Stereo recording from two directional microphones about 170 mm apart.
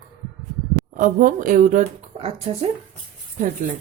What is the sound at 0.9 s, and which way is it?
Speech, 50° right (ahead or behind).